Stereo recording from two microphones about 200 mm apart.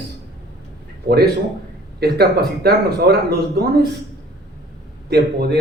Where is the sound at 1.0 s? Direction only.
50° right (ahead or behind).